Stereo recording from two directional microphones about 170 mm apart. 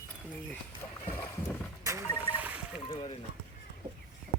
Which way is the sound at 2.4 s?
10° right (ahead or behind).